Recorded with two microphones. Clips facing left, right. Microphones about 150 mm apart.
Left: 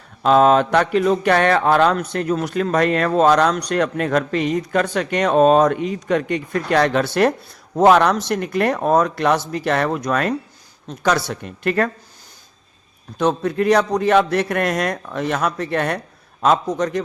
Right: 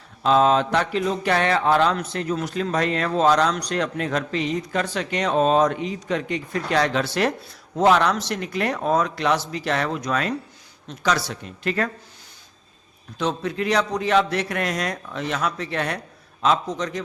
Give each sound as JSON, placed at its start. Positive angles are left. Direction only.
{"t": 0.2, "sound": "a man's voice", "side_deg": 55}
{"t": 13.1, "sound": "a man's voice", "side_deg": 50}